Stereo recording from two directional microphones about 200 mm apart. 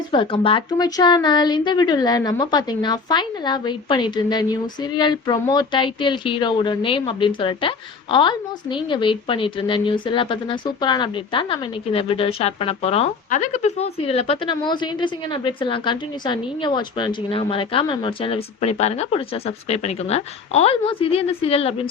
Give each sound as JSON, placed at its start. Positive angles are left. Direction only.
{"t": 0.1, "sound": "a woman's voice", "side_deg": 25}